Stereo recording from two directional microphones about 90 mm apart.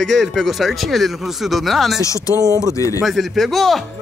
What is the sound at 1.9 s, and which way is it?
Speech, 35° left (ahead or behind).